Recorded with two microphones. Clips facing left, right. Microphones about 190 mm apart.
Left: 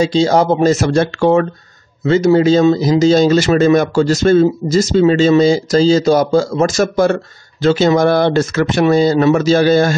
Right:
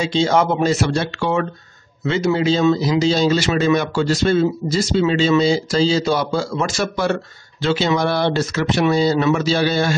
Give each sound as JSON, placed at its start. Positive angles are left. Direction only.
{"t": 0.0, "sound": "speech", "side_deg": 40}